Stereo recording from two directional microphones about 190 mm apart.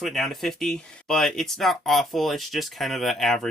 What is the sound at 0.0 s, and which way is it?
Speech, centre (ahead or behind).